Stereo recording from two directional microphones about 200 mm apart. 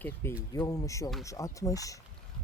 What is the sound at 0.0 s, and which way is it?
Speech, 10° left (ahead or behind).